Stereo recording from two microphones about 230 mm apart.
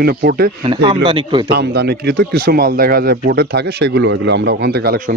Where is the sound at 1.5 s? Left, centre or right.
Right.